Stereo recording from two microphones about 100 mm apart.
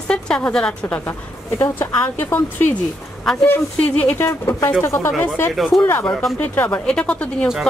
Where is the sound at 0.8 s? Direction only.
20° left (ahead or behind).